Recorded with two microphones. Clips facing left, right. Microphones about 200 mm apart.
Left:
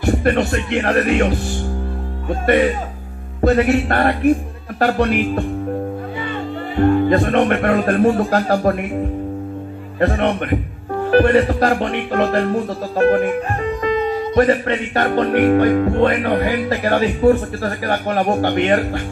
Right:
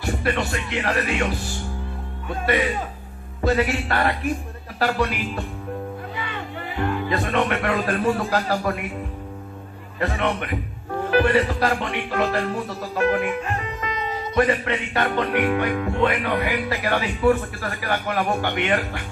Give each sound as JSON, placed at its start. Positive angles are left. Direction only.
{"t": 0.0, "sound": "speech", "side_deg": 50}
{"t": 6.8, "sound": "speech", "side_deg": 45}
{"t": 9.9, "sound": "speech", "side_deg": 45}
{"t": 11.1, "sound": "music", "side_deg": 40}